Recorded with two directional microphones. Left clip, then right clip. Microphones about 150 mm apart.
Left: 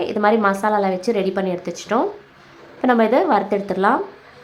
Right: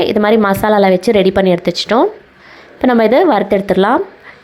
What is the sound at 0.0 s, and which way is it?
Speech, 35° right (ahead or behind).